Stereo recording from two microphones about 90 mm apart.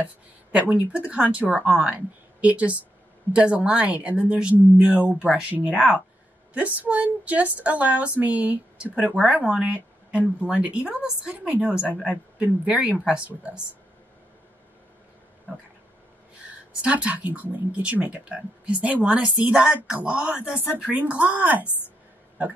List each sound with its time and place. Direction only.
0.0 s speech: 15° right (ahead or behind)
16.8 s speech: 15° right (ahead or behind)